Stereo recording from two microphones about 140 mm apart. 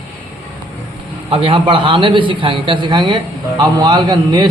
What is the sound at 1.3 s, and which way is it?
A man's voice, 40° right (ahead or behind).